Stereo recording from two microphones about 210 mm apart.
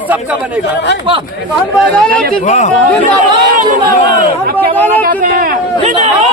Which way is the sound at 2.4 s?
35° left (ahead or behind).